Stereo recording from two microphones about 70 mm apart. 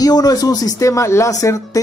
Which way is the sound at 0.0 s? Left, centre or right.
Left.